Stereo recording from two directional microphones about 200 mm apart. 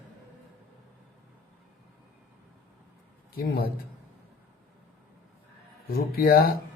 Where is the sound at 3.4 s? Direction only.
50° left (ahead or behind).